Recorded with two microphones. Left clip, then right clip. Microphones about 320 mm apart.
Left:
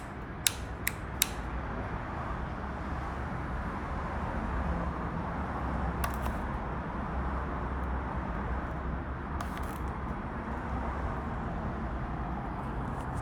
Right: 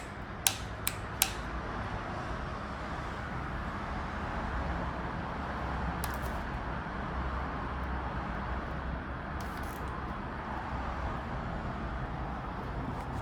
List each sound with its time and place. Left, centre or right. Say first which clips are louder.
0.4 s mechanisms: left 1 dB; centre